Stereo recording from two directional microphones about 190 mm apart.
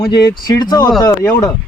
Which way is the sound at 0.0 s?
55° left (ahead or behind).